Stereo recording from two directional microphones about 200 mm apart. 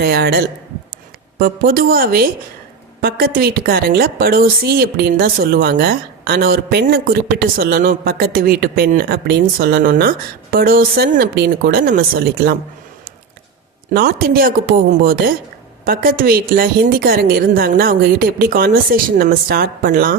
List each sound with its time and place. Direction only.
0.0 s a woman's voice: 50° right (ahead or behind)
13.9 s a woman's voice: 45° right (ahead or behind)